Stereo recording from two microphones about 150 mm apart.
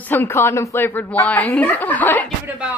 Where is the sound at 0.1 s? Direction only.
15° left (ahead or behind).